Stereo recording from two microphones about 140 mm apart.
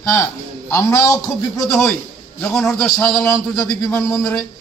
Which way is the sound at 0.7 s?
20° left (ahead or behind).